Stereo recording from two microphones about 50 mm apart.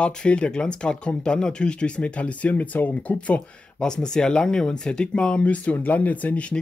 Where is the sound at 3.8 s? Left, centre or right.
Centre; by 6.4 s left.